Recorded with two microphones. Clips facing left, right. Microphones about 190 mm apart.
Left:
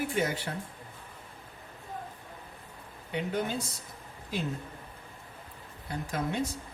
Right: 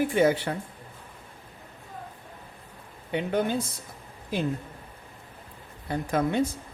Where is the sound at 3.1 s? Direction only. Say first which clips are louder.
Right 5 dB; 60° right (ahead or behind).